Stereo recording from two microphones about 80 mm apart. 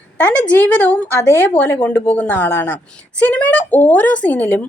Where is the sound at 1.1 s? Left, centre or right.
Left.